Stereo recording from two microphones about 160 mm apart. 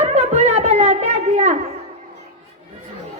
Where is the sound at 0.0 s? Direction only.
45° right (ahead or behind).